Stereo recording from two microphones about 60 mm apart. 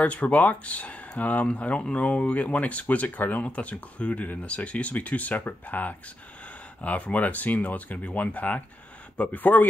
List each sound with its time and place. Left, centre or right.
0.0 s speech: left